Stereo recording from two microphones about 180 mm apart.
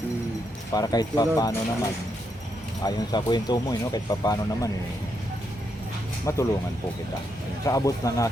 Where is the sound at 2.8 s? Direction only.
25° left (ahead or behind).